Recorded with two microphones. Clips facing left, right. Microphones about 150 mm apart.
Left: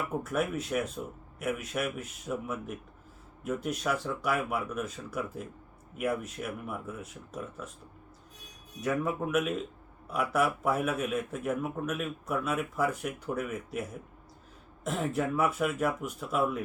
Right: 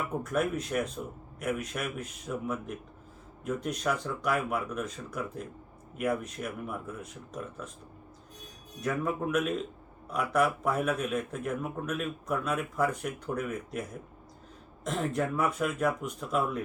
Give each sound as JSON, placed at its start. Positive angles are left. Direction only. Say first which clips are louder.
{"t": 0.2, "sound": "speech", "louder": "right 3 dB", "side_deg": 5}
{"t": 8.8, "sound": "speech", "louder": "even", "side_deg": 5}
{"t": 14.8, "sound": "speech", "louder": "even", "side_deg": 5}